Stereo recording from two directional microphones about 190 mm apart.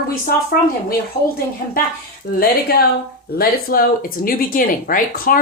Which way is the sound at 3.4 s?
50° left (ahead or behind).